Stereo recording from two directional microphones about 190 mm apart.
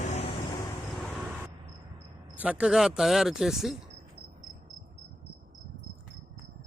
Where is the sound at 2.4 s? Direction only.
5° right (ahead or behind).